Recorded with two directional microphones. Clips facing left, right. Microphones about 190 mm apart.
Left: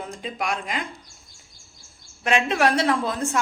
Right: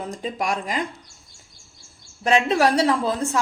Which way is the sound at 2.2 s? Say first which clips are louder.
Right 2 dB; 35° right (ahead or behind).